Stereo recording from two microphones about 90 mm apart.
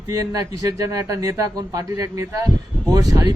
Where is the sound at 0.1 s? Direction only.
40° right (ahead or behind).